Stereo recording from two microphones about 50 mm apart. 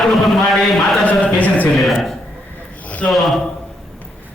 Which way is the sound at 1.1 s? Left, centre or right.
Left.